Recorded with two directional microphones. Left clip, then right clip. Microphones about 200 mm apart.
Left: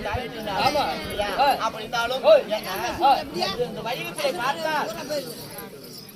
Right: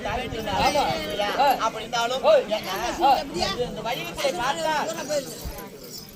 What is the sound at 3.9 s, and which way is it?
Speech, 5° right (ahead or behind).